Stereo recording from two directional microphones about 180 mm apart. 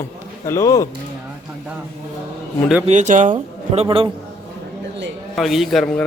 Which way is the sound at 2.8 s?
40° right (ahead or behind).